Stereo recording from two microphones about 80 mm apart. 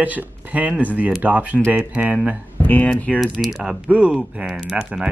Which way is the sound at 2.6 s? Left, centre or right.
Left.